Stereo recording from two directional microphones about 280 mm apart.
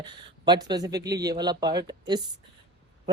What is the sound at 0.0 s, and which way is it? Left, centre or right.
Speech, centre.